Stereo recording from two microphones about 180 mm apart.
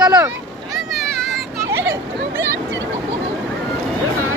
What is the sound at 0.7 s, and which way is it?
Vehicle, centre (ahead or behind).